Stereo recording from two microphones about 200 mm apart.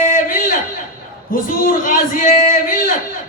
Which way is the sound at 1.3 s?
45° left (ahead or behind).